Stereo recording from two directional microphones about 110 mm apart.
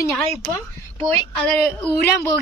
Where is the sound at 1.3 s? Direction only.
10° left (ahead or behind).